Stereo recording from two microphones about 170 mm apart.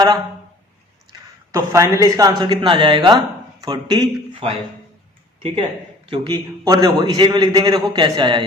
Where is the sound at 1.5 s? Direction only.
20° right (ahead or behind).